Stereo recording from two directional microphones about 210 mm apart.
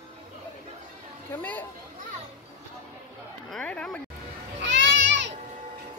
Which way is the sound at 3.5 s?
5° left (ahead or behind).